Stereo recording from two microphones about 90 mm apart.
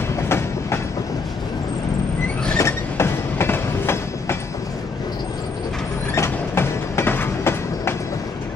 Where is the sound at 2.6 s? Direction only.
30° left (ahead or behind).